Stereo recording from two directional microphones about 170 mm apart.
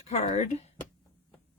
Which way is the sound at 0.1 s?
40° left (ahead or behind).